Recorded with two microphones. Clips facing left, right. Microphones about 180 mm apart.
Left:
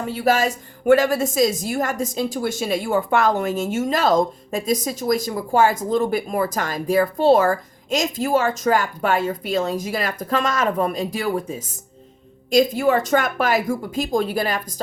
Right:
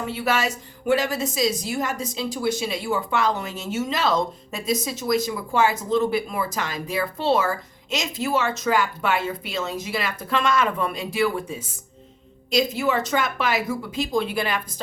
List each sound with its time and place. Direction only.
0.0 s speech: 40° left (ahead or behind)